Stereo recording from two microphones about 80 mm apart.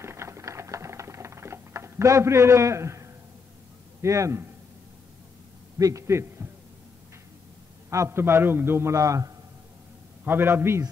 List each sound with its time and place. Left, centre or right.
0.0 s a sound: right
4.0 s a man's voice: right
5.8 s a man's voice: right
7.9 s a man's voice: right
10.2 s a man's voice: right